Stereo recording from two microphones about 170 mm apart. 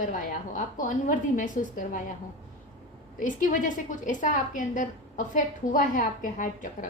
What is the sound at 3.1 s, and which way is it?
A woman's voice, 50° left (ahead or behind).